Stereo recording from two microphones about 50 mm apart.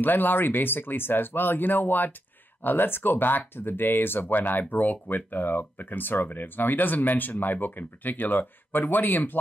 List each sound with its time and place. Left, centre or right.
0.0 s speech: left